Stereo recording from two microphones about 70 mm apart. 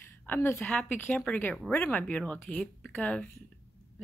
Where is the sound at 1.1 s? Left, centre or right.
Centre.